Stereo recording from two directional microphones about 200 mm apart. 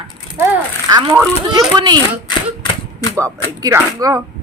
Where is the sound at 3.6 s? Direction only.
15° right (ahead or behind).